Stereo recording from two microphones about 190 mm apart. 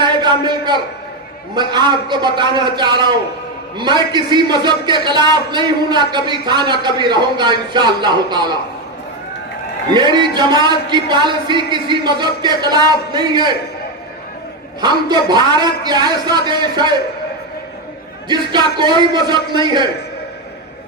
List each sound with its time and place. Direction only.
0.0 s a sound: 25° right (ahead or behind)
1.5 s a man's voice: 25° right (ahead or behind)
9.9 s a man's voice: 25° right (ahead or behind)
14.8 s a man's voice: 20° right (ahead or behind)
18.3 s a man's voice: 25° right (ahead or behind)